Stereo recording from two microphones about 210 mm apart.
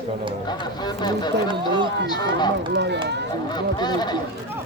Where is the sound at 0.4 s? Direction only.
20° left (ahead or behind).